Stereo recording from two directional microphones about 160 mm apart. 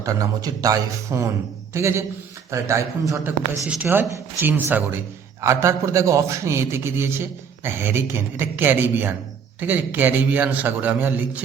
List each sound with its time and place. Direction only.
0.0 s a man's voice: 20° right (ahead or behind)